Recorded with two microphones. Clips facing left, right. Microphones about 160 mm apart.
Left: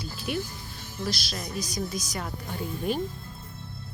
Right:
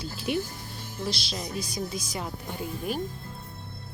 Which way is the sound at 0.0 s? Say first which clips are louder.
Right 2 dB; 25° right (ahead or behind).